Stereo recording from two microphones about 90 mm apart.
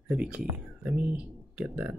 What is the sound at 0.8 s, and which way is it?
Speech, centre (ahead or behind).